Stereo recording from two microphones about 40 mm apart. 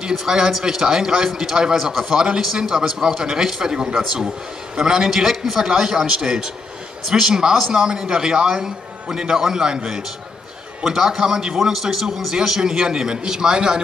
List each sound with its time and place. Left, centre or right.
0.2 s a man's voice: centre